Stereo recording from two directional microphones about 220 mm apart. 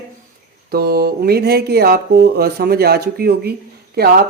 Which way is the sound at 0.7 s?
45° right (ahead or behind).